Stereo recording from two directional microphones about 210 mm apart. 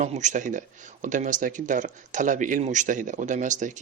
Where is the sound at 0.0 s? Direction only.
35° right (ahead or behind).